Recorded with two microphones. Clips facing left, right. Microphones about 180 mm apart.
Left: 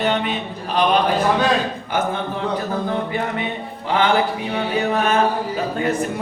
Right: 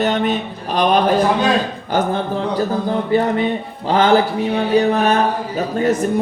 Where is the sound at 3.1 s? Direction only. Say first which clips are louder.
Right 8 dB; 35° right (ahead or behind).